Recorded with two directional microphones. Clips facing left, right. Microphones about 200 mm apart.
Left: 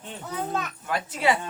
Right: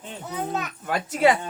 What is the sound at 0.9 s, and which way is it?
Speech, 45° right (ahead or behind).